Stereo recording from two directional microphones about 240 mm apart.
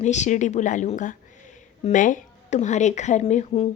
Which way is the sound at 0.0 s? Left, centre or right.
Left.